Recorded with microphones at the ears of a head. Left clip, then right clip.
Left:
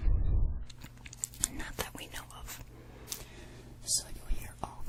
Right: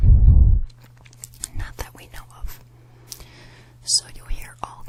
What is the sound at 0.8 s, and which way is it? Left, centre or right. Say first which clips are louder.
Whispering: left 1 dB; centre.